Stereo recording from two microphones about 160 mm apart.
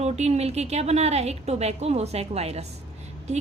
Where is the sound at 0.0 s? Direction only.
40° right (ahead or behind).